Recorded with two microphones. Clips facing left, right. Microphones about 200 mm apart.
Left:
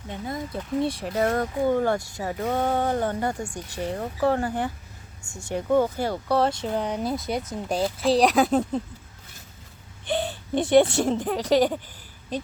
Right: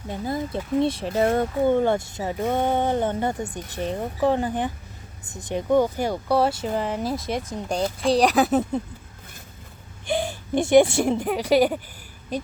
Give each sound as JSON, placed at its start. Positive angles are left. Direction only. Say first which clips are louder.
{"t": 0.1, "sound": "speech", "louder": "right 4 dB", "side_deg": -30}
{"t": 10.1, "sound": "speech", "louder": "right 2 dB", "side_deg": -10}